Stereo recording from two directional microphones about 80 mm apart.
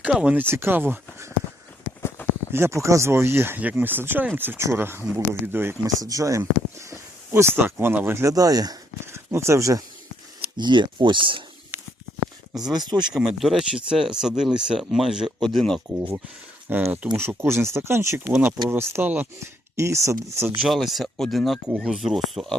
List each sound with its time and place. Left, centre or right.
0.0 s speech: centre
0.5 s speech: right
2.5 s speech: right
5.8 s speech: right
8.3 s speech: right
9.1 s speech: right
10.6 s speech: right
12.7 s speech: right
13.1 s speech: centre
15.4 s speech: centre
16.6 s speech: right
19.7 s speech: right
20.6 s speech: centre